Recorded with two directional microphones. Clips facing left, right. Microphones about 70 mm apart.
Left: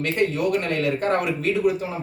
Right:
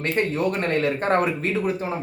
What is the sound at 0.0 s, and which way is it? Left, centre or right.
A man's voice, right.